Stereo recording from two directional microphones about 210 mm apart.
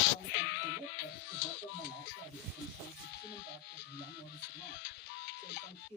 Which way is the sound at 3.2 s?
50° left (ahead or behind).